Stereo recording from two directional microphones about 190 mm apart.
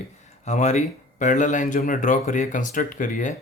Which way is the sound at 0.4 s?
35° left (ahead or behind).